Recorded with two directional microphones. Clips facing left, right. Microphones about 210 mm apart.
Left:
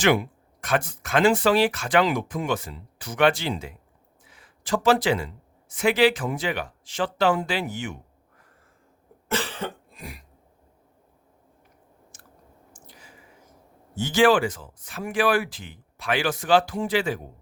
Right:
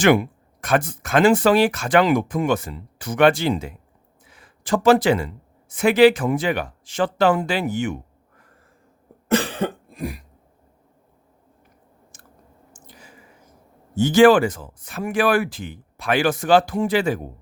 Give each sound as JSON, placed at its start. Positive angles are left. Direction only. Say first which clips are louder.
{"t": 0.0, "sound": "speech", "louder": "right 5 dB", "side_deg": -50}
{"t": 9.4, "sound": "cough", "louder": "right 7 dB", "side_deg": -50}
{"t": 12.7, "sound": "a sound", "louder": "right 1 dB", "side_deg": -45}
{"t": 13.9, "sound": "speech", "louder": "right 6 dB", "side_deg": -45}